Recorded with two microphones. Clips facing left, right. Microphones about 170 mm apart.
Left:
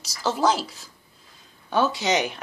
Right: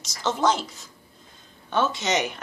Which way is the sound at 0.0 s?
35° left (ahead or behind).